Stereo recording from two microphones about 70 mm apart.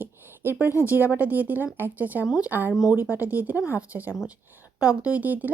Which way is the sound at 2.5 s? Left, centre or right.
Right.